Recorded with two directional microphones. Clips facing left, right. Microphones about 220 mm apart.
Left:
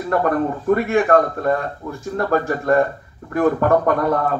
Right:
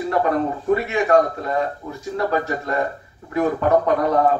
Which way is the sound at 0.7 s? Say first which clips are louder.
Left 1 dB; 50° left (ahead or behind).